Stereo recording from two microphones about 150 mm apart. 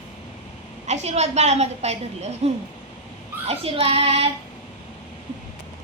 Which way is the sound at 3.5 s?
40° right (ahead or behind).